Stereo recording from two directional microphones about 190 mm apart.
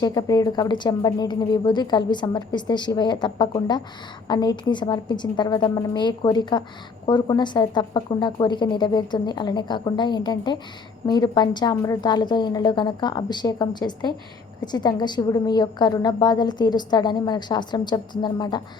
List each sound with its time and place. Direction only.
0.0 s a woman's voice: 20° left (ahead or behind)